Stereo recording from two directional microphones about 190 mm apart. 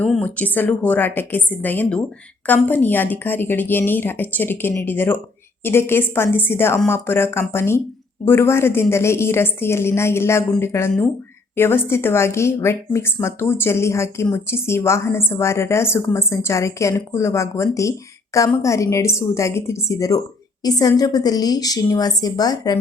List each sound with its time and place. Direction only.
0.0 s a woman's voice: 5° left (ahead or behind)